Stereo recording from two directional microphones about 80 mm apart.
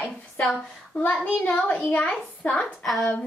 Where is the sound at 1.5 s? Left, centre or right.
Left.